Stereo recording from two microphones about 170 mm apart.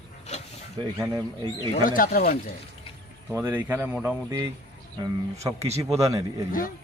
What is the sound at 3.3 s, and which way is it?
A man's voice, 10° right (ahead or behind).